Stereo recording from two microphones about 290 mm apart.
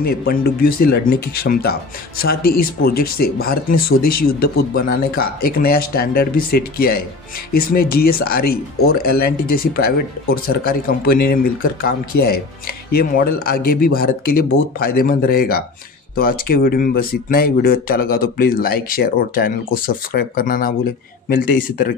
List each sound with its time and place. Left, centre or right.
0.0 s speech: left